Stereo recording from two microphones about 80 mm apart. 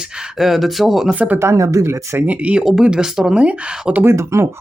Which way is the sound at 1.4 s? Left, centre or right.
Right.